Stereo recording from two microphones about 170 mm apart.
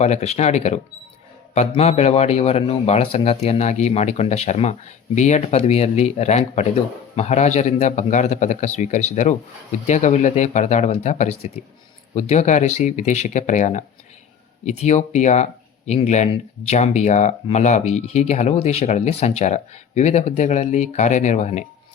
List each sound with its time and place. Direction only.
0.0 s speech: 40° left (ahead or behind)